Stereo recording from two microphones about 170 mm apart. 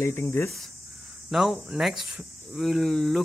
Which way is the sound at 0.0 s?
15° left (ahead or behind).